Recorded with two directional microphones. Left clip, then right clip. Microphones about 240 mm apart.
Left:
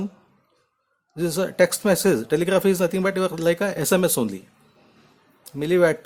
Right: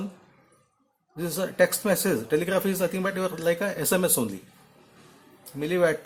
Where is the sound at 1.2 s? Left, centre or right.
Left.